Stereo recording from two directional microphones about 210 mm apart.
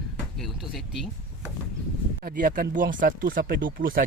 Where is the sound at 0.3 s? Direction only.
Centre (ahead or behind).